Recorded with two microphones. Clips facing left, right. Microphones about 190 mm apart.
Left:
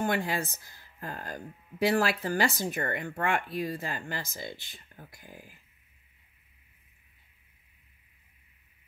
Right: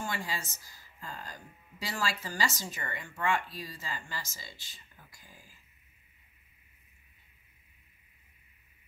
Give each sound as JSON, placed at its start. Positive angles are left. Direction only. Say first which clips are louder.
{"t": 0.0, "sound": "speech", "louder": "left 8 dB", "side_deg": 60}